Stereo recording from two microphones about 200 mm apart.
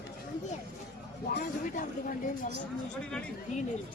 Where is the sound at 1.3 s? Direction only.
55° left (ahead or behind).